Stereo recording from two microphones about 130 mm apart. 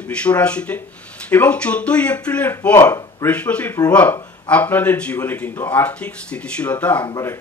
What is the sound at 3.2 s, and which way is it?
Speech, 10° left (ahead or behind).